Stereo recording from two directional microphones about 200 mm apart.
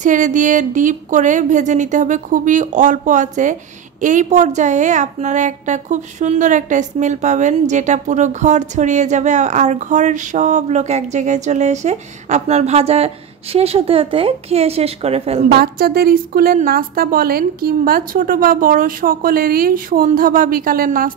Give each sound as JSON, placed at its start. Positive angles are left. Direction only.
{"t": 0.0, "sound": "a woman's voice", "side_deg": -40}
{"t": 15.5, "sound": "a woman's voice", "side_deg": -50}